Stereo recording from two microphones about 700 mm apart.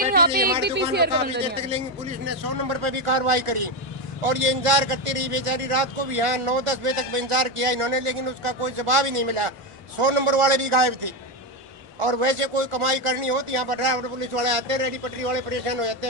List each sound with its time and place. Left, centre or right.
0.1 s speech: centre
2.6 s a man's voice: right